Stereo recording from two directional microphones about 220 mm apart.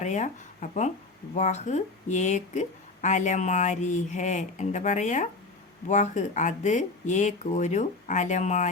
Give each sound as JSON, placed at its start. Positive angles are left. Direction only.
{"t": 0.0, "sound": "speech", "side_deg": 35}